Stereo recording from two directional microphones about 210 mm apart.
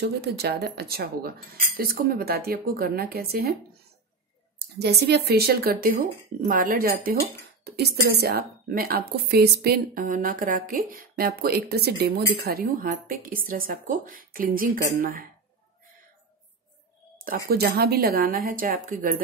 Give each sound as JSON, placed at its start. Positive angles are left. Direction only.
{"t": 0.0, "sound": "speech", "side_deg": -50}
{"t": 4.6, "sound": "speech", "side_deg": -50}
{"t": 17.5, "sound": "speech", "side_deg": -45}